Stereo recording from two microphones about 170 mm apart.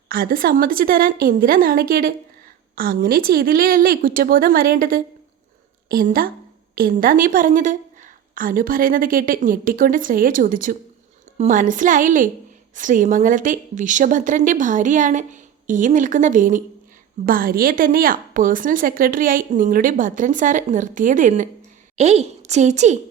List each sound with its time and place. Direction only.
0.1 s a woman's voice: 60° right (ahead or behind); by 23.0 s 45° right (ahead or behind)